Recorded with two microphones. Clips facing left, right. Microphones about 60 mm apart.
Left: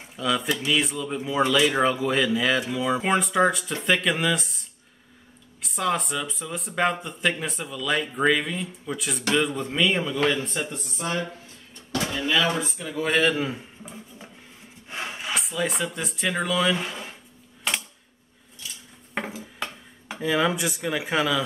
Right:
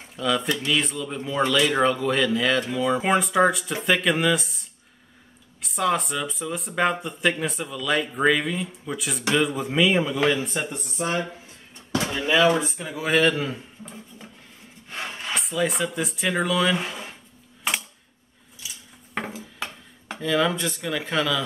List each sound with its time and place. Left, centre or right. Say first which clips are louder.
0.1 s speech: right 1 dB; centre
11.9 s speech: right 2 dB; centre
12.9 s a man's voice: right 1 dB; centre
18.6 s cutlery: even; centre
19.1 s a sound: even; centre
20.2 s speech: even; centre